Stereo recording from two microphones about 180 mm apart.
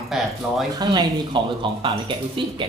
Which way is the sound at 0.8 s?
25° right (ahead or behind).